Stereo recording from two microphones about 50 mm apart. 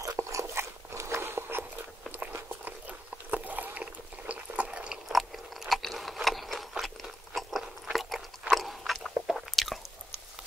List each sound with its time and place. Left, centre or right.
0.1 s biting: right
2.6 s a sound: right
3.8 s liquid: right
5.0 s chewing: centre
6.2 s crunch: centre
9.3 s chewing: centre